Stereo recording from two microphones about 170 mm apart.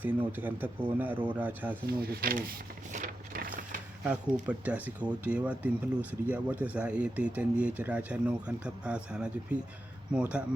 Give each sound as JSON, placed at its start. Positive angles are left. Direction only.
{"t": 0.0, "sound": "speech", "side_deg": -10}
{"t": 2.0, "sound": "speech", "side_deg": -65}
{"t": 2.9, "sound": "a sound", "side_deg": -50}
{"t": 4.0, "sound": "speech", "side_deg": -10}